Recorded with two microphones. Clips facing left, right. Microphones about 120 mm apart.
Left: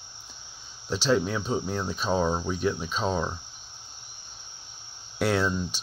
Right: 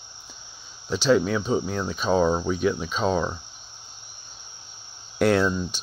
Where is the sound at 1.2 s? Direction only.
80° right.